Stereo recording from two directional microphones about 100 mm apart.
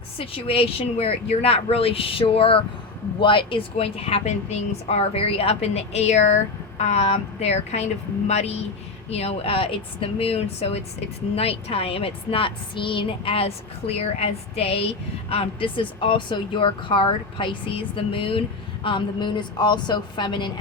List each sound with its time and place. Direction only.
0.2 s a woman's voice: 75° left (ahead or behind); by 10.8 s 90° left
11.3 s a woman's voice: 75° left (ahead or behind)
15.3 s speech: 70° left (ahead or behind); by 20.5 s 50° left (ahead or behind)